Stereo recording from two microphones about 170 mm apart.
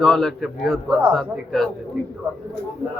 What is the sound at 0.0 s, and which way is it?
A man's voice, centre (ahead or behind).